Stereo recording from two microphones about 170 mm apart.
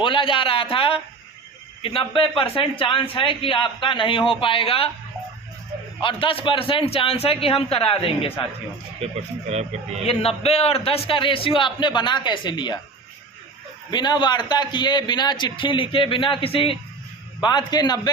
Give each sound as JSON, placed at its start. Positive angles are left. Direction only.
{"t": 0.0, "sound": "a man's voice", "side_deg": 30}
{"t": 6.0, "sound": "a man's voice", "side_deg": 30}
{"t": 9.0, "sound": "speech", "side_deg": -40}
{"t": 10.1, "sound": "a man's voice", "side_deg": 40}
{"t": 13.9, "sound": "a man's voice", "side_deg": 25}